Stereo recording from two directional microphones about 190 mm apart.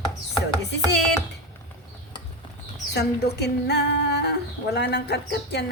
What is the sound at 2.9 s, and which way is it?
Speech, 60° left (ahead or behind).